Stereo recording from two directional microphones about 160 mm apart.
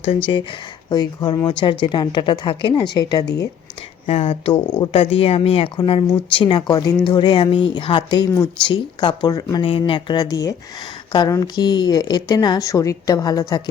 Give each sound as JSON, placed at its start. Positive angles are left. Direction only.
{"t": 0.3, "sound": "speech", "side_deg": 30}
{"t": 3.2, "sound": "speech", "side_deg": 90}
{"t": 4.0, "sound": "speech", "side_deg": 40}